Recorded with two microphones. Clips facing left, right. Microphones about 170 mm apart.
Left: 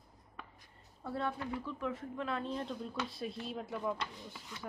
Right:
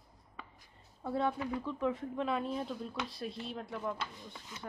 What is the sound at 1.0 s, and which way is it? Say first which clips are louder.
Speech: right 4 dB; 15° right (ahead or behind).